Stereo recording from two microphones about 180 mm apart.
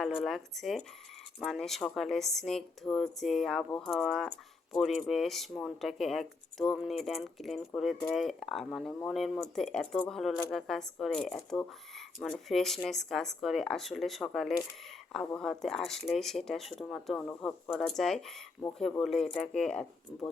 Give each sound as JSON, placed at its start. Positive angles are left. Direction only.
{"t": 0.0, "sound": "speech", "side_deg": 0}